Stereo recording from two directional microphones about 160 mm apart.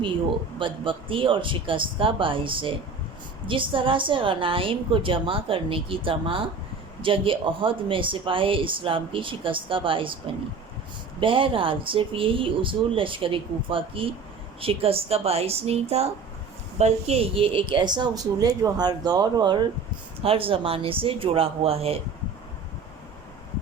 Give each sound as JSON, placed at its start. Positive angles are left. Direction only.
{"t": 0.6, "sound": "speech", "side_deg": -30}
{"t": 11.2, "sound": "a woman's voice", "side_deg": -35}